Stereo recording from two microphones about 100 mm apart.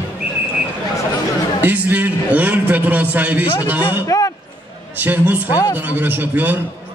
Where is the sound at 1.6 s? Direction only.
20° right (ahead or behind).